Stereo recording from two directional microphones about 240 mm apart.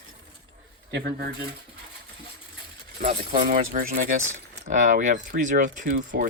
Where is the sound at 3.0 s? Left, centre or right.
Right.